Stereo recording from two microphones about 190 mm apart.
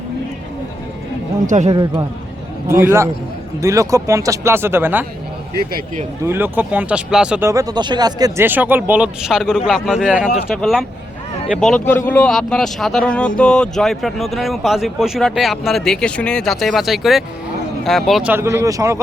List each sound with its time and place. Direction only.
1.5 s speech: 40° right (ahead or behind)
1.7 s a man's voice: 20° right (ahead or behind)
6.2 s speech: 10° right (ahead or behind)